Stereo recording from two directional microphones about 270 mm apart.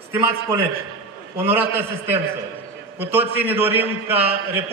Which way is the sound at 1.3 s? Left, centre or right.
Centre.